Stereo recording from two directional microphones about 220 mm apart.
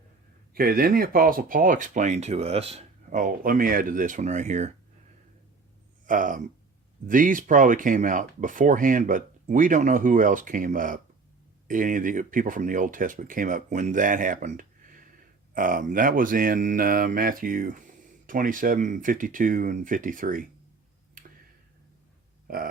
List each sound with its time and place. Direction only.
0.5 s speech: 40° right (ahead or behind)
6.1 s speech: 35° right (ahead or behind)
22.4 s burping: 40° right (ahead or behind)